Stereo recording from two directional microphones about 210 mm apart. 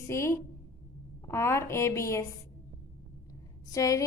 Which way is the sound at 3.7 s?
15° left (ahead or behind).